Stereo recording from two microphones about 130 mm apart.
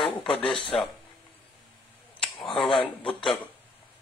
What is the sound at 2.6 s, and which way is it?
Speech, 45° left (ahead or behind).